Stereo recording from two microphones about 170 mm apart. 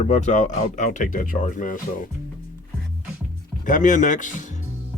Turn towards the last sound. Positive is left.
turn(degrees=50)  # may be behind; listen again after turning